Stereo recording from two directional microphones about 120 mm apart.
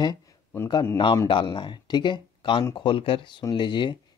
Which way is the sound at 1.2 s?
40° left (ahead or behind).